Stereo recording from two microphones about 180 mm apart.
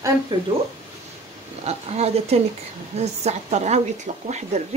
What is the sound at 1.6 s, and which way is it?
Speech, 35° right (ahead or behind).